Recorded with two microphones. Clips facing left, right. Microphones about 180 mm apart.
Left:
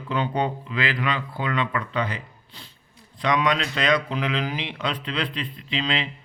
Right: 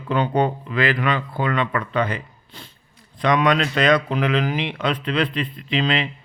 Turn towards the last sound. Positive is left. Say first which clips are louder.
# right 5 dB
turn(degrees=-55)  # may be behind; listen again after turning